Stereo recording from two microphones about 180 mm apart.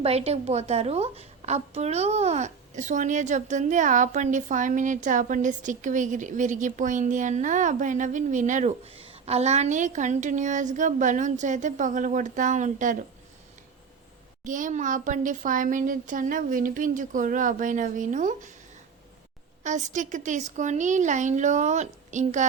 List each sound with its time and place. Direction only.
0.0 s a woman's voice: 35° right (ahead or behind)
14.4 s a woman's voice: 45° right (ahead or behind)
19.6 s a woman's voice: 45° right (ahead or behind)